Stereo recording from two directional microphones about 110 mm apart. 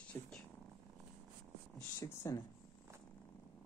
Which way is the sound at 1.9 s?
25° left (ahead or behind).